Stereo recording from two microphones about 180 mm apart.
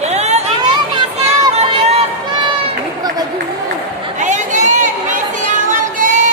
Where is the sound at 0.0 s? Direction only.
40° right (ahead or behind).